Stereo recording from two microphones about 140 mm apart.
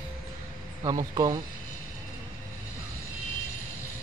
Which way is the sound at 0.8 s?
30° right (ahead or behind).